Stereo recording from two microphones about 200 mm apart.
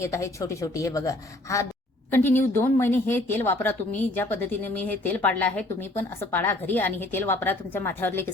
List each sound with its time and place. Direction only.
0.0 s speech: 15° left (ahead or behind)